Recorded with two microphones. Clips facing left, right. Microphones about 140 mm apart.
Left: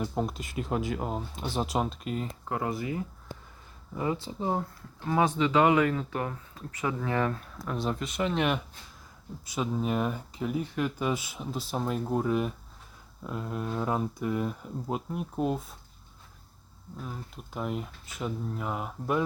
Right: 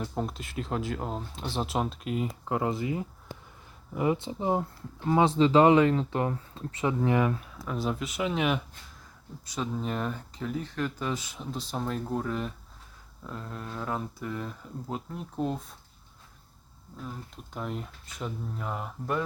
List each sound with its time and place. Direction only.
0.0 s speech: 5° left (ahead or behind)
2.5 s speech: 20° right (ahead or behind); by 15.7 s 5° left (ahead or behind)
17.0 s speech: 5° left (ahead or behind)